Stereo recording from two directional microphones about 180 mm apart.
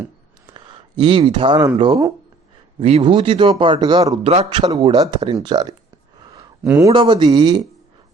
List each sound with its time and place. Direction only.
0.5 s speech: 25° right (ahead or behind)
2.7 s speech: 35° right (ahead or behind)
4.6 s speech: 20° right (ahead or behind)
6.6 s speech: 10° right (ahead or behind)
6.9 s speech: 25° right (ahead or behind)